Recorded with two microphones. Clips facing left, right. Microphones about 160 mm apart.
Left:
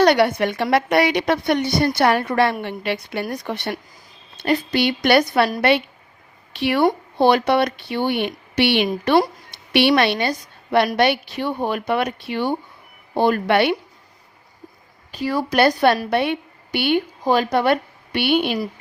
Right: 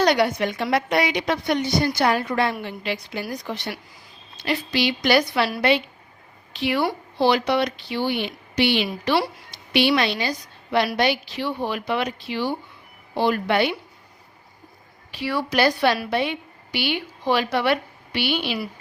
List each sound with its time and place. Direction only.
0.0 s a woman's voice: 60° left (ahead or behind)
6.6 s speech: 60° left (ahead or behind)
15.1 s a woman's voice: 45° left (ahead or behind)